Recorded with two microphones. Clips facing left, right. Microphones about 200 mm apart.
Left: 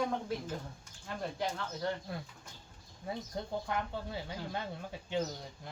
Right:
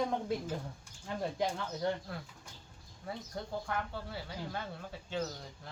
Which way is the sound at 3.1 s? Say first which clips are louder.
Left 2 dB; 20° left (ahead or behind).